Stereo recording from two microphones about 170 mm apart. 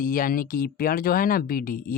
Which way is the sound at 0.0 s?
55° left (ahead or behind).